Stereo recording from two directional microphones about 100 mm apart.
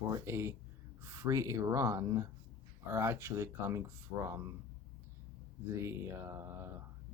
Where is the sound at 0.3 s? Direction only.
25° right (ahead or behind).